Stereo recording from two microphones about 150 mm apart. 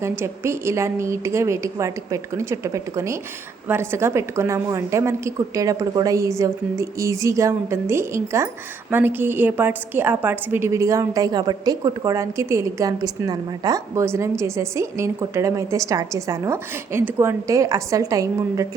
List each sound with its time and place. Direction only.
0.0 s a woman's voice: 15° right (ahead or behind)